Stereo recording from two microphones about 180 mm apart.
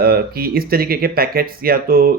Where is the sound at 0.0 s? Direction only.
55° right (ahead or behind).